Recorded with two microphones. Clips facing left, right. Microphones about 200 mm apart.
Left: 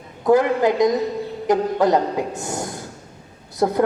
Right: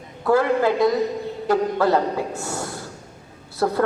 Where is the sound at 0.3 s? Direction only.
15° left (ahead or behind).